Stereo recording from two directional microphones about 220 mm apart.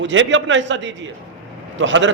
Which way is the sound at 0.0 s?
60° right (ahead or behind).